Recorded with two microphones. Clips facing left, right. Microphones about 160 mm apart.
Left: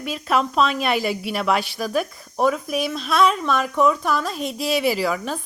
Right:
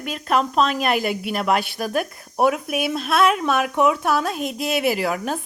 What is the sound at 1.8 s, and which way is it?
Speech, 50° right (ahead or behind).